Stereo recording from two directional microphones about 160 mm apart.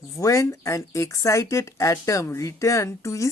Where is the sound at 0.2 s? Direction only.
20° left (ahead or behind).